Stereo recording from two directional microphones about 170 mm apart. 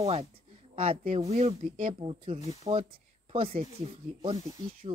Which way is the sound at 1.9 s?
35° right (ahead or behind).